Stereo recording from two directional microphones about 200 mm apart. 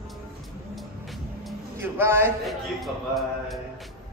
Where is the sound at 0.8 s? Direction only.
Centre (ahead or behind).